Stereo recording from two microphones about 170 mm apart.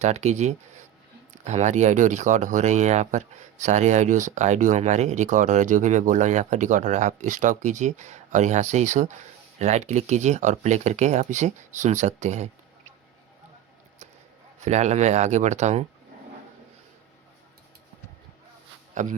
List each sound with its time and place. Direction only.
0.0 s speech: 40° right (ahead or behind)
14.6 s speech: 40° right (ahead or behind)
19.0 s speech: 45° right (ahead or behind)